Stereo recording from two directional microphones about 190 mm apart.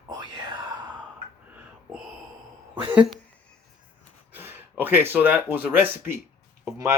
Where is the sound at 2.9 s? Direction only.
5° right (ahead or behind).